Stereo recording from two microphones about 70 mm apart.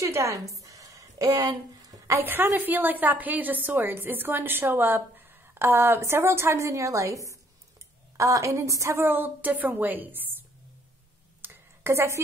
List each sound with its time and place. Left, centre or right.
0.0 s a sound: right
1.5 s speech: right
2.2 s a woman's voice: right
6.7 s a woman's voice: right
8.9 s a woman's voice: right
11.4 s a sound: right